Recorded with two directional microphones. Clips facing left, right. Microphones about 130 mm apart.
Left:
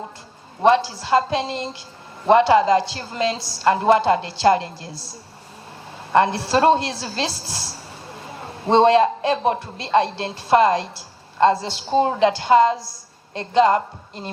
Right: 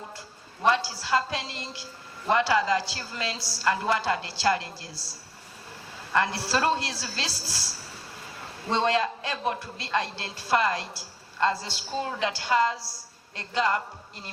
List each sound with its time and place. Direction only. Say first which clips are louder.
0.6 s a man's voice: left 8 dB; 20° left (ahead or behind)
6.1 s a man's voice: left 9 dB; 20° left (ahead or behind)